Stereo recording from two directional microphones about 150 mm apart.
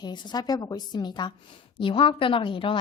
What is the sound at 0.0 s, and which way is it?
A woman's voice, 30° left (ahead or behind).